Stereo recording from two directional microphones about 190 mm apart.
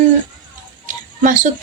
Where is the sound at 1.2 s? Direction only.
40° right (ahead or behind).